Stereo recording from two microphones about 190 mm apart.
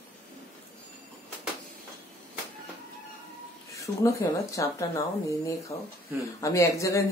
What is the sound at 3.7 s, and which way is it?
Speech, 15° left (ahead or behind).